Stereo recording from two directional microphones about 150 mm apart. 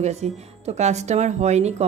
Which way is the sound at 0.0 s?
45° right (ahead or behind).